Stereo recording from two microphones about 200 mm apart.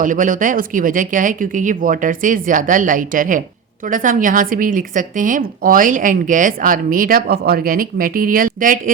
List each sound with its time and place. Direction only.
0.0 s a woman's voice: 40° right (ahead or behind)